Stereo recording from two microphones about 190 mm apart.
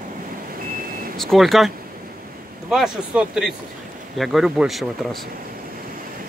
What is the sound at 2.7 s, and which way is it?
Speech, 5° right (ahead or behind).